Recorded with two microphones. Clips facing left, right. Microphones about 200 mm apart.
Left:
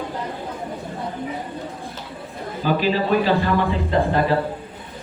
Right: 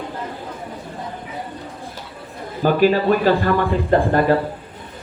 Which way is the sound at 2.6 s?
50° right (ahead or behind).